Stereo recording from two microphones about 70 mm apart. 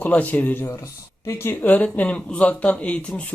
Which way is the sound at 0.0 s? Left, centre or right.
Left.